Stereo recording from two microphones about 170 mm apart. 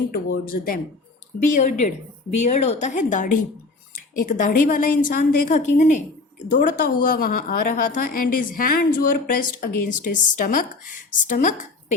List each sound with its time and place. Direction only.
0.1 s a woman's voice: 60° left (ahead or behind)
1.5 s a woman's voice: 45° left (ahead or behind)